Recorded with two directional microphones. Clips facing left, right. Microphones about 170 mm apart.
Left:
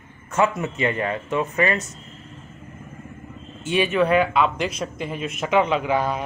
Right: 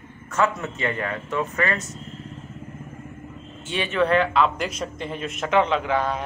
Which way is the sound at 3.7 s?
10° left (ahead or behind).